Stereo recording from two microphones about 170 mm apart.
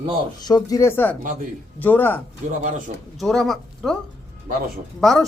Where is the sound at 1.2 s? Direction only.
50° right (ahead or behind).